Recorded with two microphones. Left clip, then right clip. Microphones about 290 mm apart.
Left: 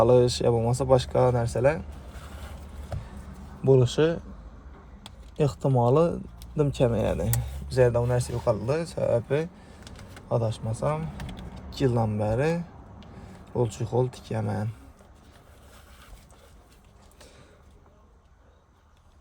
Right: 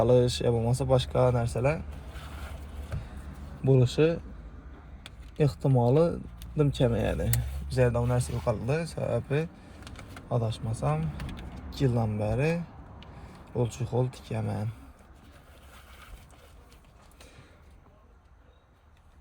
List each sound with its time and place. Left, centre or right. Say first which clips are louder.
0.0 s speech: left 4 dB; left
3.6 s speech: left 3 dB; left
5.0 s a sound: left 2 dB; centre
5.6 s speech: left 3 dB; left